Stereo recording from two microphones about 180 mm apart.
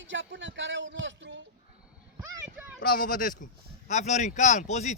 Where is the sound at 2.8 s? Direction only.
55° left (ahead or behind).